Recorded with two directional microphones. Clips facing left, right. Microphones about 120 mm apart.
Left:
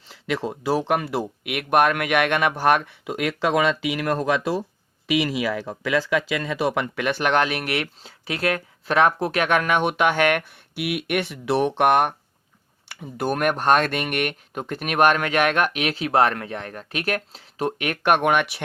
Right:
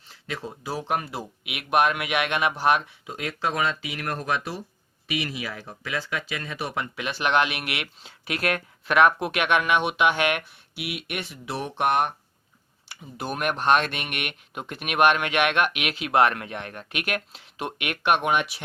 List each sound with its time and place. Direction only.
0.1 s speech: 90° left; by 1.2 s 70° left (ahead or behind)
1.5 s speech: 50° left (ahead or behind); by 4.0 s 90° left
5.0 s speech: 90° left; by 18.6 s 60° left (ahead or behind)